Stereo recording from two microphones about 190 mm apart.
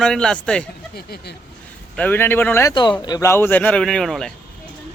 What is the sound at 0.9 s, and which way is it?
Speech, 55° left (ahead or behind).